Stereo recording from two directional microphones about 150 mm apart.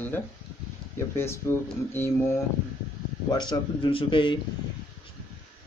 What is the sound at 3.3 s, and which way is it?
Speech, 30° left (ahead or behind).